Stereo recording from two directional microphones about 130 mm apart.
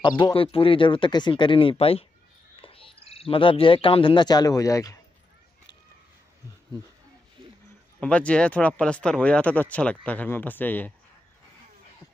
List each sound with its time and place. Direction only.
0.0 s speech: 35° left (ahead or behind)
8.0 s speech: 10° left (ahead or behind)